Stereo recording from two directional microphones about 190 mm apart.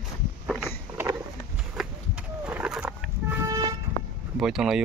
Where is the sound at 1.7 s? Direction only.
5° right (ahead or behind).